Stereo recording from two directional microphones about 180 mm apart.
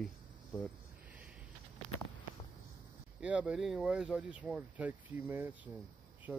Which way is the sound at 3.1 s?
5° right (ahead or behind).